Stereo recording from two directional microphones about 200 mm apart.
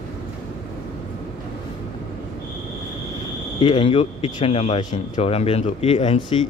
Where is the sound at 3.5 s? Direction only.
25° left (ahead or behind).